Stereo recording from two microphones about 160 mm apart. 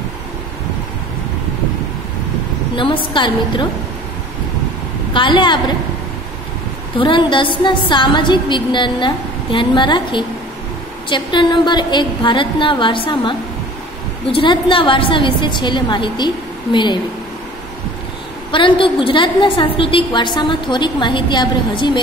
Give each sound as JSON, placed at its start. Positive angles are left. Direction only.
{"t": 2.7, "sound": "a woman's voice", "side_deg": 30}
{"t": 5.1, "sound": "a woman's voice", "side_deg": 30}
{"t": 7.0, "sound": "a woman's voice", "side_deg": 30}
{"t": 18.5, "sound": "a woman's voice", "side_deg": 30}